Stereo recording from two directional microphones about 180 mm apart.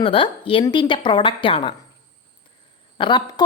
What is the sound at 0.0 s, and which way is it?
Speech, 30° left (ahead or behind).